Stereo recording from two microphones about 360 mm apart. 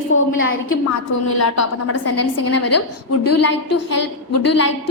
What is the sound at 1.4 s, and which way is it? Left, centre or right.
A woman's voice, left.